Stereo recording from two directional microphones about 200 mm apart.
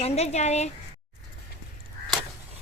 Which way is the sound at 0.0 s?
35° left (ahead or behind).